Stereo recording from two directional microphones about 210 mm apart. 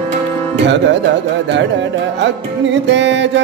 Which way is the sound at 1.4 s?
60° right (ahead or behind).